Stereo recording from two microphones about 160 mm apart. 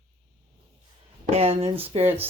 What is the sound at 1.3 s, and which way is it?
Speech, 40° right (ahead or behind).